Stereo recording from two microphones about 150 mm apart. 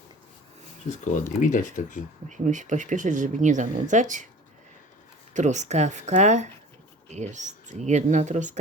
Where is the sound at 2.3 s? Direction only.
55° right (ahead or behind).